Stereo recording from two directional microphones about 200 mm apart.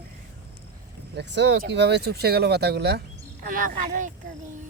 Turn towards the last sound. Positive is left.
turn(degrees=-40)  # may be behind; listen again after turning